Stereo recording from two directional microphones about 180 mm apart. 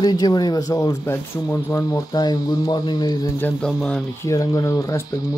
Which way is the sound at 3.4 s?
5° left (ahead or behind).